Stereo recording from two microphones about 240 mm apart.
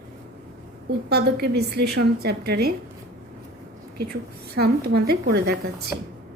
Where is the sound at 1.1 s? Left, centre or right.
Right.